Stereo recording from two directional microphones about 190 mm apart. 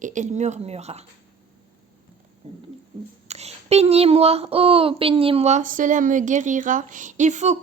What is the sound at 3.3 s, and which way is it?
Speech, 35° right (ahead or behind).